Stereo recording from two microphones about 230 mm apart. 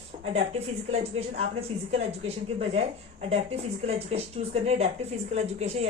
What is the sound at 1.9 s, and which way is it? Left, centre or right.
A woman's voice, right.